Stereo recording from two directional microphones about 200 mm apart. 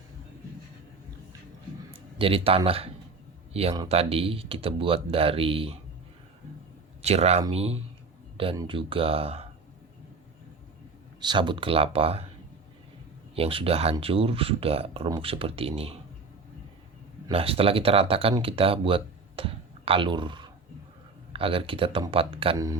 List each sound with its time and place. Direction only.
1.9 s speech: 25° right (ahead or behind)
7.0 s speech: 30° right (ahead or behind)
11.2 s speech: 20° right (ahead or behind)
13.3 s speech: 30° right (ahead or behind)
17.2 s speech: 30° right (ahead or behind)